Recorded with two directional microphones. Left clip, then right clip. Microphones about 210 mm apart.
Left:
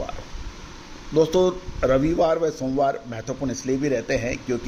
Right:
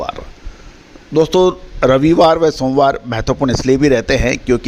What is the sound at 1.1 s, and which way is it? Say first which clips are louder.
Speech: right 7 dB; 40° right (ahead or behind).